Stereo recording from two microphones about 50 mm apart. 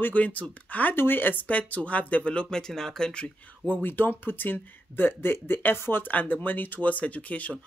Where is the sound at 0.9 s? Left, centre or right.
Left.